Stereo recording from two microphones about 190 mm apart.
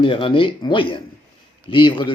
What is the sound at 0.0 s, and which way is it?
Speech, 25° left (ahead or behind).